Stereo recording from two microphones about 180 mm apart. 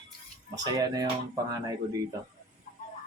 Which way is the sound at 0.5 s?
20° right (ahead or behind).